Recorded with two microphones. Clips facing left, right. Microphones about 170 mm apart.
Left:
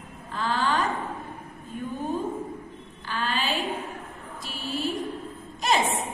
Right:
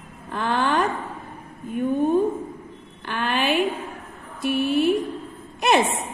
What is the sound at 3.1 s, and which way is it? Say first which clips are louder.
Speech: right 6 dB; 60° right (ahead or behind).